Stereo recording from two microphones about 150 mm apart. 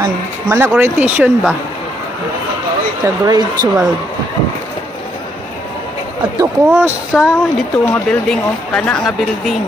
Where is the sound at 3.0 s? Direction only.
20° right (ahead or behind).